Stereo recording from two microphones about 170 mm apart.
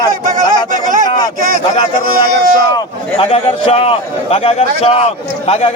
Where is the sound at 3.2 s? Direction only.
35° left (ahead or behind).